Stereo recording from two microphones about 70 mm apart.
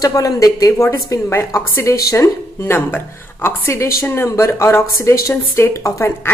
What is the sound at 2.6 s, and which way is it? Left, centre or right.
A woman's voice, left.